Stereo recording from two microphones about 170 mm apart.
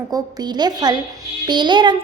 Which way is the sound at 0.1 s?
25° right (ahead or behind).